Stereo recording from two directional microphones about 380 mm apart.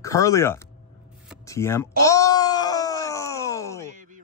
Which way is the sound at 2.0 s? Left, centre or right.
Centre.